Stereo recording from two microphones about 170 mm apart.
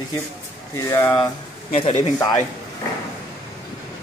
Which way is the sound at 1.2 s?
30° left (ahead or behind).